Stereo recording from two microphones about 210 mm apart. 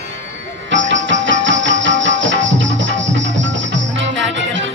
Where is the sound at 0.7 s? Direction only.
60° right (ahead or behind).